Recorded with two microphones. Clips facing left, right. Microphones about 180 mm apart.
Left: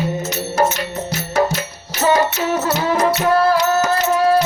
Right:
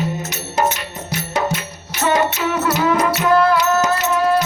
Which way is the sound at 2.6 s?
30° left (ahead or behind).